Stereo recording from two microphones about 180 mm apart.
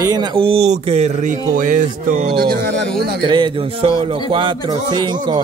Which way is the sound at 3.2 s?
25° right (ahead or behind).